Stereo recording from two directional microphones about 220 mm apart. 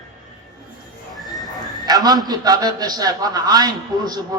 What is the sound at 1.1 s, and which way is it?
Horse, centre (ahead or behind).